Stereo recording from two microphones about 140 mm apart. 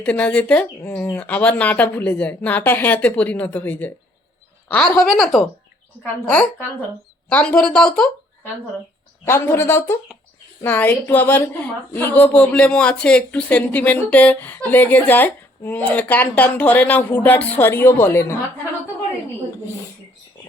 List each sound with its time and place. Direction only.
0.0 s a woman's voice: 10° left (ahead or behind)
9.2 s a woman's voice: 15° left (ahead or behind)